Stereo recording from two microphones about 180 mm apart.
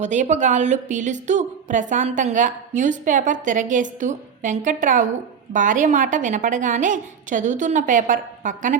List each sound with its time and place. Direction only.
0.0 s a woman's voice: 40° right (ahead or behind)